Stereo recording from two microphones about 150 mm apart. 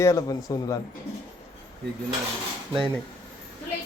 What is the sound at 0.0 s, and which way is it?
Speech, 20° left (ahead or behind).